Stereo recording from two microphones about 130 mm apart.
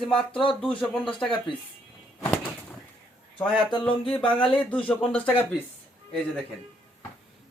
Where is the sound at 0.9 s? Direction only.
5° left (ahead or behind).